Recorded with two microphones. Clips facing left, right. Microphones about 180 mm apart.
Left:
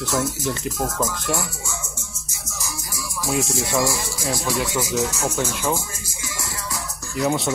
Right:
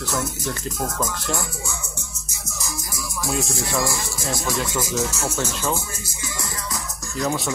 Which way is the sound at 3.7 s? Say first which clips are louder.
Left 2 dB; 10° left (ahead or behind).